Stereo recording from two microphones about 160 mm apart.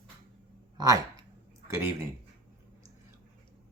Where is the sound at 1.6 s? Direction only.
15° right (ahead or behind).